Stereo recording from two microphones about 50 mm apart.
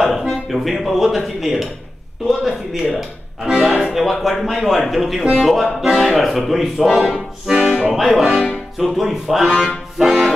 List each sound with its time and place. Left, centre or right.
0.0 s speech: centre
3.4 s speech: centre
3.9 s speech: centre
6.1 s speech: centre